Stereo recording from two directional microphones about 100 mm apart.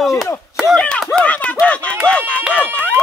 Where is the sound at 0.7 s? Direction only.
10° left (ahead or behind).